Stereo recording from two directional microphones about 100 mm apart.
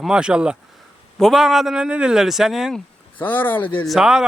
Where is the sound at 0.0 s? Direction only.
10° right (ahead or behind).